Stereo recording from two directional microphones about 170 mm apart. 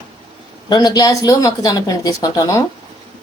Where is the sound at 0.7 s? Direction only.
25° left (ahead or behind).